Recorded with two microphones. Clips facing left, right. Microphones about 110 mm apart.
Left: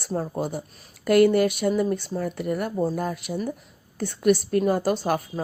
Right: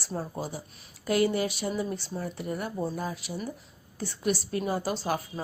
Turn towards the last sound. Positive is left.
turn(degrees=55)  # may be behind; listen again after turning